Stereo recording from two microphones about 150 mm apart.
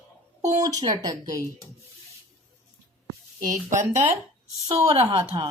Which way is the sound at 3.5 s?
55° right (ahead or behind).